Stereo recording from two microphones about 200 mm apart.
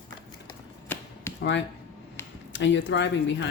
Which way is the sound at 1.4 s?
65° left (ahead or behind).